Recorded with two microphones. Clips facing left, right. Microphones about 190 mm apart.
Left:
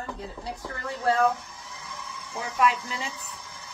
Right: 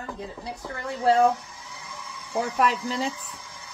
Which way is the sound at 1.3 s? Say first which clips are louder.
Right 3 dB; centre (ahead or behind).